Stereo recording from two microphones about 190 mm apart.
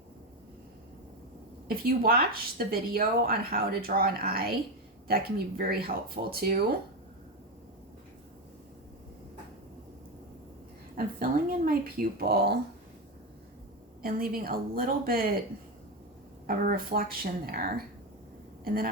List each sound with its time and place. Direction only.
1.6 s speech: 50° right (ahead or behind)
10.9 s speech: 45° right (ahead or behind)
14.0 s speech: 50° right (ahead or behind)
16.5 s speech: 50° right (ahead or behind)